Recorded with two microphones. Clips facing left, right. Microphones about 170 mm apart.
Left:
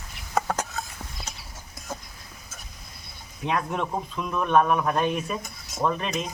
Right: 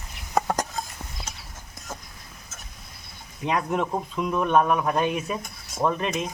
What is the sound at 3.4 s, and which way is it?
Speech, 10° right (ahead or behind).